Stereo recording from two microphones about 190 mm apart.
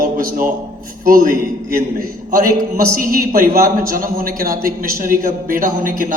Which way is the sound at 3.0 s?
50° right (ahead or behind).